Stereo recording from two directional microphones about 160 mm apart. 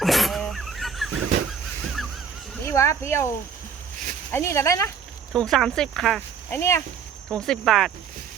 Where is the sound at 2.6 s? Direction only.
15° left (ahead or behind).